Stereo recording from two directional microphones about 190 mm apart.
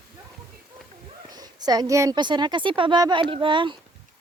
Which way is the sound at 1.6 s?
20° right (ahead or behind).